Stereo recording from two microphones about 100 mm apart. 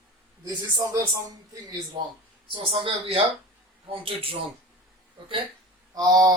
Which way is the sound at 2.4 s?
60° right (ahead or behind).